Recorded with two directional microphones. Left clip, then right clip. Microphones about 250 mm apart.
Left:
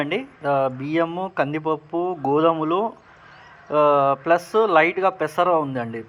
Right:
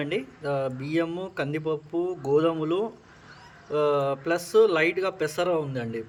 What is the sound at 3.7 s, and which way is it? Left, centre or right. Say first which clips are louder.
Speech: left 7 dB; centre.